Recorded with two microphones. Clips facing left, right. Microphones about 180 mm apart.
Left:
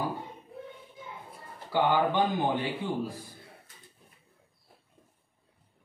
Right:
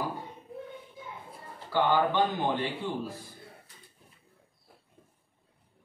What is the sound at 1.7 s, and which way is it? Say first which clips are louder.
Speech: even; 10° left (ahead or behind).